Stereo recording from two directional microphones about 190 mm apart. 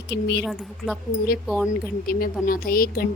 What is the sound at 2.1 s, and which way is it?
Speech, 50° left (ahead or behind).